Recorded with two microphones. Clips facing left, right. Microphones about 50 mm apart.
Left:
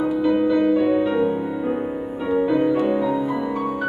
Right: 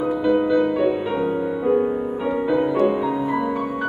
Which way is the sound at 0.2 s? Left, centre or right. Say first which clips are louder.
Right 1 dB; centre.